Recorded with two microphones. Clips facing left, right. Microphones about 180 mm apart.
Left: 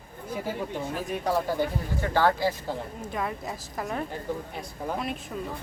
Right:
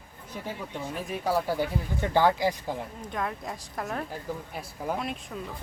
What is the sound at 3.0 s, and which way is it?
Speech, 5° left (ahead or behind).